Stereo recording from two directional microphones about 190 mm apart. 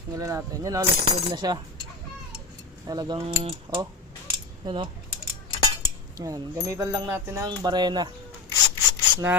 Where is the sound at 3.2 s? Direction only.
30° right (ahead or behind).